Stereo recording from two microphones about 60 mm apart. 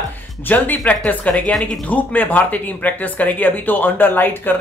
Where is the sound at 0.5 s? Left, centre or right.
Left.